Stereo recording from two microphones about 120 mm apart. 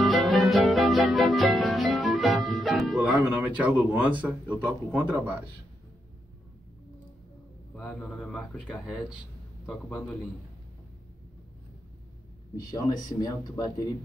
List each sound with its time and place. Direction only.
0.0 s music: centre (ahead or behind)
4.6 s a man's voice: 10° right (ahead or behind)
7.7 s speech: 10° left (ahead or behind)
12.5 s speech: 35° left (ahead or behind)